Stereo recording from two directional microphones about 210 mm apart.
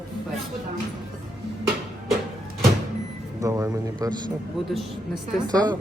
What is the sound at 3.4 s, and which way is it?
Speech, 15° right (ahead or behind).